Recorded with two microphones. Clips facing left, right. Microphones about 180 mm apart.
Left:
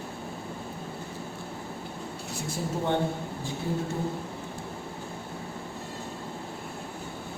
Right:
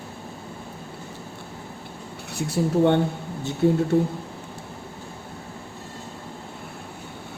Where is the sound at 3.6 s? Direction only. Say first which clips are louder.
Right 13 dB; 65° right (ahead or behind).